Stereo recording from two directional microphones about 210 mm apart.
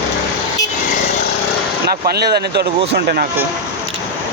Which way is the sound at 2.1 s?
50° right (ahead or behind).